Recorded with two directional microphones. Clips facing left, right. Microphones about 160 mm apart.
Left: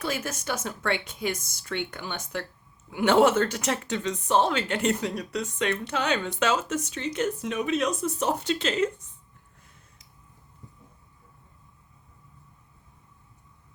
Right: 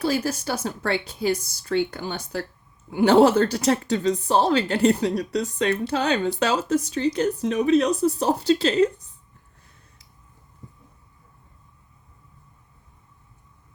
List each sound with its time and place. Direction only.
0.0 s speech: 30° right (ahead or behind)